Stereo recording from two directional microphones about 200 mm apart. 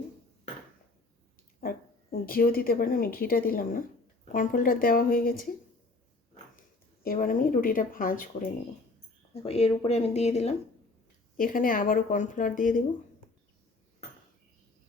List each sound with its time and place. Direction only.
1.6 s a woman's voice: 45° left (ahead or behind)
7.0 s a woman's voice: 45° left (ahead or behind)
9.3 s speech: 30° left (ahead or behind)
11.3 s a woman's voice: 45° left (ahead or behind)